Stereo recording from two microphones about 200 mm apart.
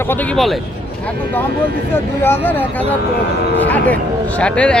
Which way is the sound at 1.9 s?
10° left (ahead or behind).